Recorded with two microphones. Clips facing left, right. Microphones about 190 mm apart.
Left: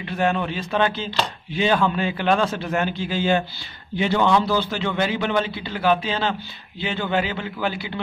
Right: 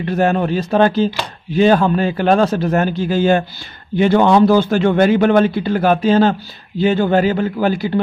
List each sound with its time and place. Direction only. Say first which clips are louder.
0.0 s a man's voice: right 7 dB; 45° right (ahead or behind)